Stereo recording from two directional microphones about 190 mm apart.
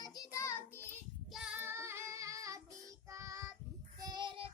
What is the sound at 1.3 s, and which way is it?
Child singing, 5° right (ahead or behind).